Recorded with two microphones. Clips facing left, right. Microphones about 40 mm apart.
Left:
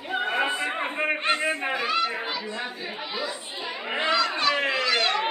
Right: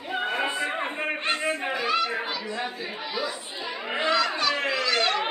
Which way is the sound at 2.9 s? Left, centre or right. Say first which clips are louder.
Right 1 dB; centre.